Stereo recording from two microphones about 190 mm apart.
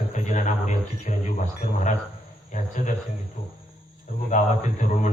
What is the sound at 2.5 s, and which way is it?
Speech, 40° left (ahead or behind).